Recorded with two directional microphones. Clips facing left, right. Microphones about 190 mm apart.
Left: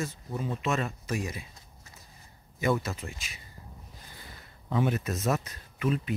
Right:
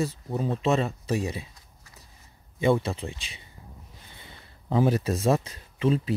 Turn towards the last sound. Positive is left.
turn(degrees=-30)  # may be behind; listen again after turning